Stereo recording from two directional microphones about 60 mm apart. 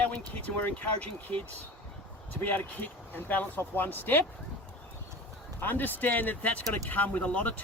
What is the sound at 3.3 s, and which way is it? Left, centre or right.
Speech, left.